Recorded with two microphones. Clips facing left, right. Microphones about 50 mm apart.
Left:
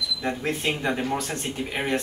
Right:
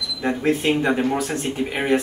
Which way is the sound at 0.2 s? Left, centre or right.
Centre.